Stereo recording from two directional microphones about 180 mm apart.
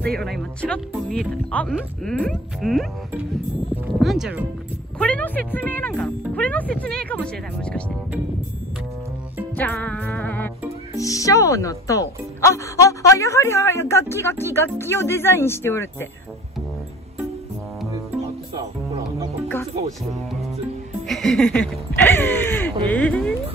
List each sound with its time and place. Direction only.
0.2 s speech: centre (ahead or behind)
4.0 s speech: centre (ahead or behind)
4.9 s speech: 5° left (ahead or behind)
9.6 s music: 10° left (ahead or behind)
11.0 s speech: 20° left (ahead or behind)
18.6 s music: 20° right (ahead or behind)
21.1 s speech: centre (ahead or behind)